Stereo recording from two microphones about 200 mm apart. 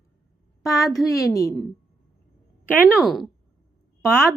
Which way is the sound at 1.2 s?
15° left (ahead or behind).